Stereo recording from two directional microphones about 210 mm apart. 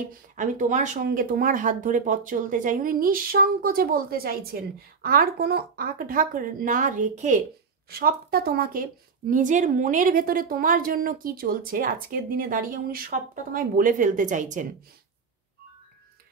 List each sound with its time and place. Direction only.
0.4 s speech: 35° right (ahead or behind)
7.9 s a woman's voice: 45° right (ahead or behind)